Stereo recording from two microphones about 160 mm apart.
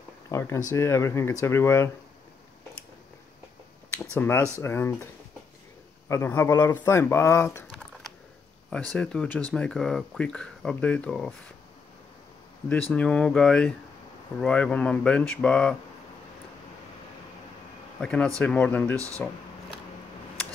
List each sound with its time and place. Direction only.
0.3 s speech: 20° left (ahead or behind)
4.0 s speech: 15° left (ahead or behind)
6.0 s speech: 15° left (ahead or behind)
8.6 s speech: 5° left (ahead or behind)
12.9 s speech: 5° left (ahead or behind)
18.0 s speech: 5° left (ahead or behind)
18.9 s speech: 20° right (ahead or behind)